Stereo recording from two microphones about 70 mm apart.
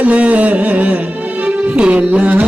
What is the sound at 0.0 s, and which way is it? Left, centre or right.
Music, centre.